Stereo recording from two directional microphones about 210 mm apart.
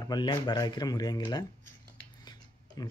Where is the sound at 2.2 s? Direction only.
20° left (ahead or behind).